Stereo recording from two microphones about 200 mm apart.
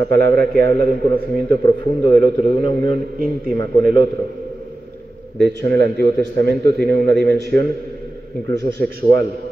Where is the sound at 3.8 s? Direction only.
50° right (ahead or behind).